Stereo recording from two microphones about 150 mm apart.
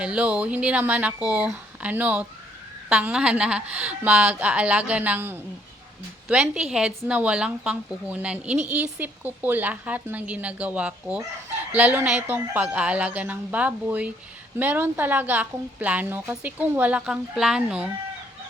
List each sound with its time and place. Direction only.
0.0 s a woman's voice: 10° right (ahead or behind)